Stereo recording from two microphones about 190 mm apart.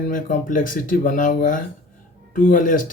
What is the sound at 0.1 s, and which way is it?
Speech, 45° left (ahead or behind).